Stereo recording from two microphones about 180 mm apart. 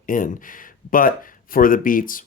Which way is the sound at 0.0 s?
50° left (ahead or behind).